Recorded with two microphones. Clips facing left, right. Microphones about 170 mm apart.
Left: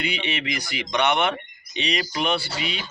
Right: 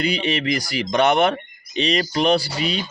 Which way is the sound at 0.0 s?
40° right (ahead or behind).